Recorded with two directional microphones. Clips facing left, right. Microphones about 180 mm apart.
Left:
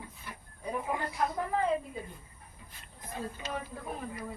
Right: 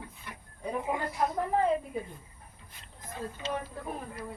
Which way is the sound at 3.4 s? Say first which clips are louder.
Right 5 dB; 25° right (ahead or behind).